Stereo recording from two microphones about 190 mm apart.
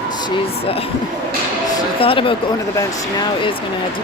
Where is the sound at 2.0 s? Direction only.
30° left (ahead or behind).